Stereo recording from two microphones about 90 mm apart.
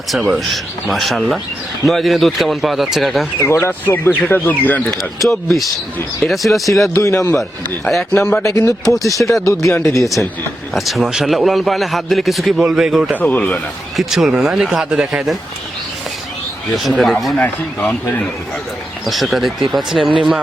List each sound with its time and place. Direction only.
0.1 s a man's voice: centre (ahead or behind)
3.3 s speech: 25° left (ahead or behind)
4.9 s a man's voice: centre (ahead or behind)
6.9 s a man's voice: 35° left (ahead or behind)
7.9 s a man's voice: centre (ahead or behind)
8.4 s a man's voice: 35° left (ahead or behind)
10.8 s a man's voice: centre (ahead or behind)
13.1 s a man's voice: 15° left (ahead or behind)
13.9 s a man's voice: centre (ahead or behind)
17.0 s a man's voice: centre (ahead or behind)
17.4 s speech: 20° left (ahead or behind)
19.0 s a man's voice: centre (ahead or behind)